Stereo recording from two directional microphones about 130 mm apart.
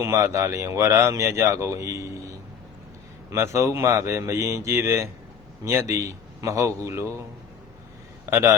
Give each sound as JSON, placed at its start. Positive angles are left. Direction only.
{"t": 0.0, "sound": "a man's voice", "side_deg": -25}
{"t": 8.3, "sound": "a man's voice", "side_deg": -20}